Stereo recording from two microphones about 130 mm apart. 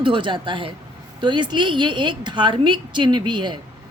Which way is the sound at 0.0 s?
40° right (ahead or behind).